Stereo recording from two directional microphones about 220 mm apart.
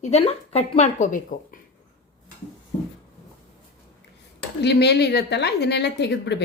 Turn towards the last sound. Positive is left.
turn(degrees=50)  # may be behind; listen again after turning